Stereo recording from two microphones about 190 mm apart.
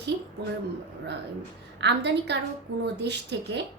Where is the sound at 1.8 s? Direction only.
65° right (ahead or behind).